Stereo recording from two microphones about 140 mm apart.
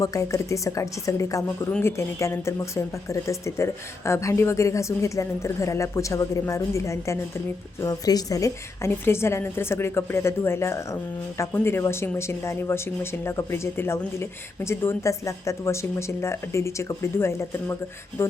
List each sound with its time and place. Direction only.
0.0 s speech: 25° left (ahead or behind)